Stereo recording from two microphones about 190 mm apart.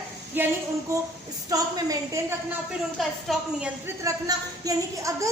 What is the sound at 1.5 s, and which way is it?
Speech, 20° right (ahead or behind).